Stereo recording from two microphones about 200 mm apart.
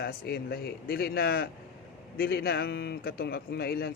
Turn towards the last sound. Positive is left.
turn(degrees=50)  # may be behind; listen again after turning